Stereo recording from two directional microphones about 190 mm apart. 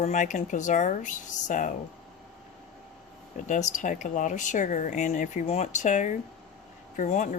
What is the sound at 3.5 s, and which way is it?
Speech, 40° left (ahead or behind).